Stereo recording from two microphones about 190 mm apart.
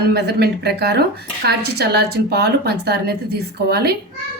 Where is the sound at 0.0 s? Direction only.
55° right (ahead or behind).